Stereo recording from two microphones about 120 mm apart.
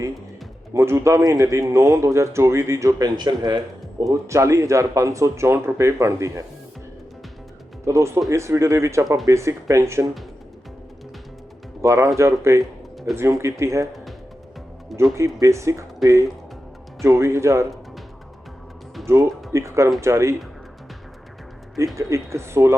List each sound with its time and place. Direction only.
0.7 s speech: 25° right (ahead or behind)
3.2 s a man's voice: 35° right (ahead or behind)
4.1 s speech: 25° right (ahead or behind)
7.9 s speech: 25° right (ahead or behind)
11.8 s speech: 25° right (ahead or behind)
14.9 s speech: 25° right (ahead or behind)
17.0 s speech: 25° right (ahead or behind)
19.0 s speech: 20° right (ahead or behind)
21.9 s speech: 25° right (ahead or behind)